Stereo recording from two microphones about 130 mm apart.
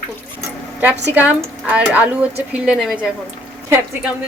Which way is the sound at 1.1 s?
10° right (ahead or behind).